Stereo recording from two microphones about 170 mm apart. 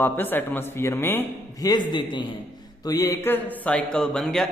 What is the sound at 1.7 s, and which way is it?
A man's voice, 25° left (ahead or behind).